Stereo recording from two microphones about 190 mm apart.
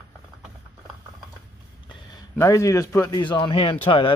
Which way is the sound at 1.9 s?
20° left (ahead or behind).